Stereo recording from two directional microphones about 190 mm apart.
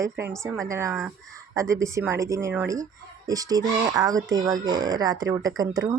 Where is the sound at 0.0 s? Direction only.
15° right (ahead or behind).